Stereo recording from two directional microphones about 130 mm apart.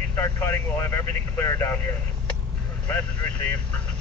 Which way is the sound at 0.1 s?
15° left (ahead or behind).